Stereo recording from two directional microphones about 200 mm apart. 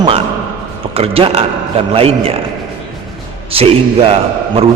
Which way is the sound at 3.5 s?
30° right (ahead or behind).